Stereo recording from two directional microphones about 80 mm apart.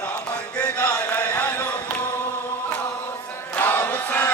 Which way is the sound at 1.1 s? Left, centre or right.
Centre.